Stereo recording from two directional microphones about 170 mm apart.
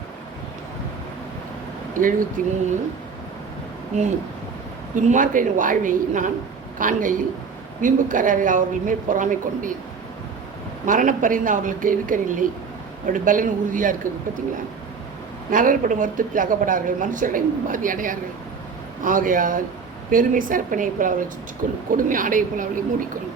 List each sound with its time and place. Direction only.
2.0 s speech: 50° right (ahead or behind)
4.9 s speech: 50° right (ahead or behind)
10.8 s speech: 50° right (ahead or behind)
15.4 s speech: 50° right (ahead or behind)